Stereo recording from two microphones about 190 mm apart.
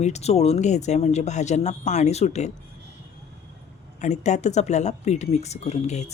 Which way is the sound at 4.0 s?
40° left (ahead or behind).